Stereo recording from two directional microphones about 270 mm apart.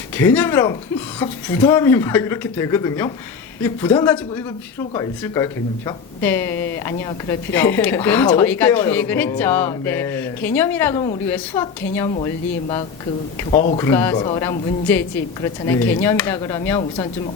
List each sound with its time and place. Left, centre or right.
0.2 s speech: centre
13.5 s speech: left
13.7 s speech: centre